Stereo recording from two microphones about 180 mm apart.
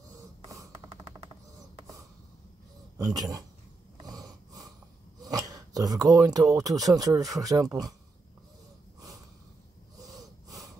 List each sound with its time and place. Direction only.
3.0 s speech: 20° right (ahead or behind)
4.0 s wheeze: 20° right (ahead or behind)
5.2 s speech: 20° right (ahead or behind)
10.0 s gasp: 20° right (ahead or behind)